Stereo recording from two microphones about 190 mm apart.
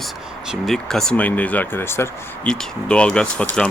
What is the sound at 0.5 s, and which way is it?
Speech, centre (ahead or behind).